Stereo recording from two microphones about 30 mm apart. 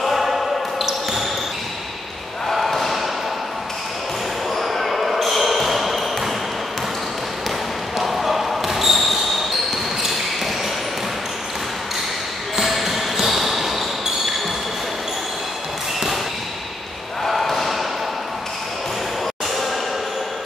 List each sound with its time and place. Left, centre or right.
0.0 s basketball bounce: centre
2.5 s slam: centre
4.6 s basketball bounce: centre
8.0 s basketball bounce: centre
12.5 s basketball bounce: centre
17.2 s a sound: centre